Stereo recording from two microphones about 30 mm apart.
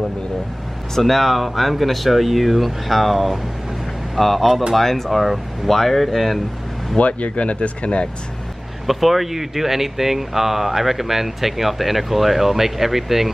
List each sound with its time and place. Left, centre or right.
0.9 s speech: centre
7.0 s speech: left
8.8 s speech: centre